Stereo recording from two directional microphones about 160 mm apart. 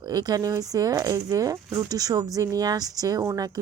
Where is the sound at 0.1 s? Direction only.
25° right (ahead or behind).